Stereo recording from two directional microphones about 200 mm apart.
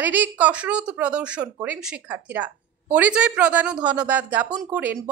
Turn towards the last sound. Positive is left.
turn(degrees=-10)  # may be behind; listen again after turning